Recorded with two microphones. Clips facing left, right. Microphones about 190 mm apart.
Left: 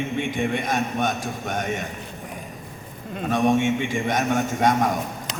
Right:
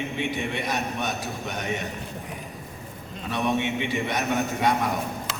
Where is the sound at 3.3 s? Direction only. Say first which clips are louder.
Left 6 dB; 45° left (ahead or behind).